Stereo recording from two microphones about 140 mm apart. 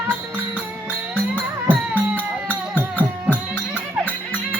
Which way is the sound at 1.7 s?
10° right (ahead or behind).